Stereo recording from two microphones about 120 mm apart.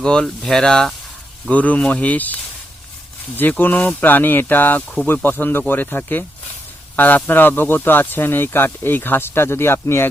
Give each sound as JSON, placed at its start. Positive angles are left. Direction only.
{"t": 0.0, "sound": "speech", "side_deg": 5}